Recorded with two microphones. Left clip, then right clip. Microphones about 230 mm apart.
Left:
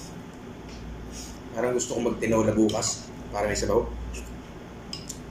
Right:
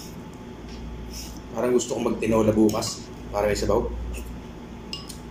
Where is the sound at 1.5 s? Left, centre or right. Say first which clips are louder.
Right 3 dB; centre.